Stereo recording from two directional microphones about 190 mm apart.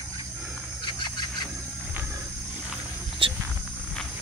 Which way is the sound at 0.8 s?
25° left (ahead or behind).